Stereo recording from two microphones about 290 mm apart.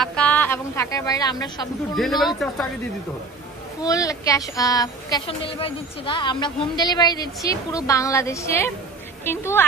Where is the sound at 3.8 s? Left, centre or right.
Centre.